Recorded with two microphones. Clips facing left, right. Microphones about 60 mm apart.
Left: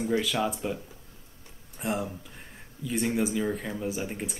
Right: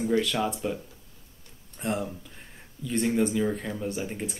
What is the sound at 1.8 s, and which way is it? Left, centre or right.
Speech, centre.